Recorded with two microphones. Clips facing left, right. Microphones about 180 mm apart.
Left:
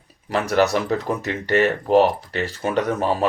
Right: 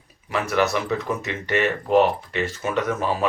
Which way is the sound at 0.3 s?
35° left (ahead or behind).